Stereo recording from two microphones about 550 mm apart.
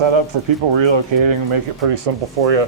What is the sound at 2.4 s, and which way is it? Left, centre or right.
Speech, right.